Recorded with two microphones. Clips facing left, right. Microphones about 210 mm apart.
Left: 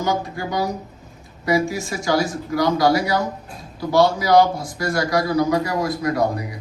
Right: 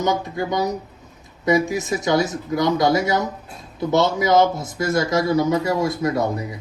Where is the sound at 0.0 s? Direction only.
20° right (ahead or behind).